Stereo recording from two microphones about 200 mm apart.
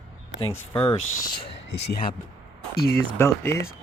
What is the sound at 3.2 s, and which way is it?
Speech, 15° left (ahead or behind).